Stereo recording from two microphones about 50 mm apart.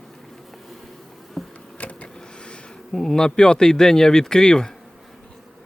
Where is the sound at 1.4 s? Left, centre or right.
Centre.